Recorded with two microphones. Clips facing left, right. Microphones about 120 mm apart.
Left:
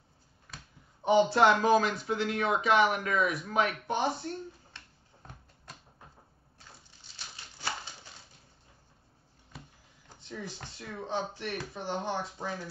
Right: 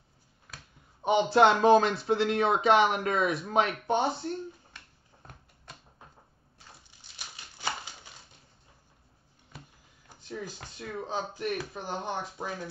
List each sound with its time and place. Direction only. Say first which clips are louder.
1.0 s speech: right 1 dB; 25° right (ahead or behind)
4.7 s finger snapping: even; 5° right (ahead or behind)
7.2 s a sound: right 1 dB; 15° right (ahead or behind)
10.8 s speech: right 1 dB; 20° right (ahead or behind)